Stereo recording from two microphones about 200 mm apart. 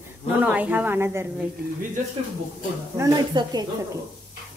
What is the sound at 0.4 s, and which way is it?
Speech, 5° right (ahead or behind).